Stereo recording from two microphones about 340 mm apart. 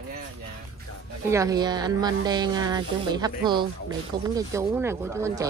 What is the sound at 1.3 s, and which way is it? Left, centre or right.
Speech, centre.